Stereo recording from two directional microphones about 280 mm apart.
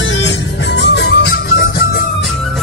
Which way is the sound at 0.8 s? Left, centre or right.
Left.